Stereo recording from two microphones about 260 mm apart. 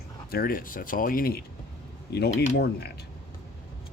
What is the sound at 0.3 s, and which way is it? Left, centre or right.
Speech, left.